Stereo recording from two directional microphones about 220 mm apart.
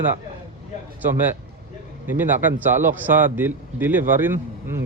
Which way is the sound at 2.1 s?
10° right (ahead or behind).